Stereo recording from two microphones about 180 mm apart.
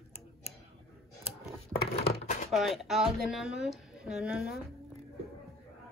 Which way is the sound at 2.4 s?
Centre (ahead or behind).